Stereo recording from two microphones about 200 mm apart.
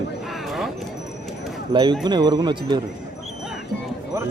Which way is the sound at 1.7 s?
25° right (ahead or behind).